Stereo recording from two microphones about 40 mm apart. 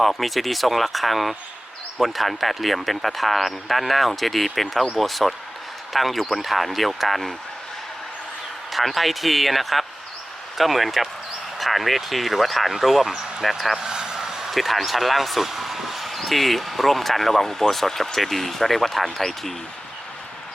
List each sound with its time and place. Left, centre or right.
0.0 s speech: centre
8.7 s speech: centre
13.7 s a sound: centre
14.5 s speech: centre